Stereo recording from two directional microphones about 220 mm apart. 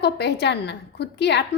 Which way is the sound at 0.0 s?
50° left (ahead or behind).